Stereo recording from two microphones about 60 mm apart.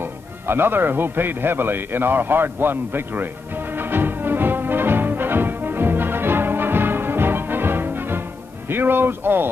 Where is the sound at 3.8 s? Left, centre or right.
Right.